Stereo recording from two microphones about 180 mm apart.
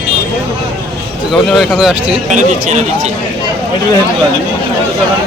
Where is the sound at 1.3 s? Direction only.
Centre (ahead or behind).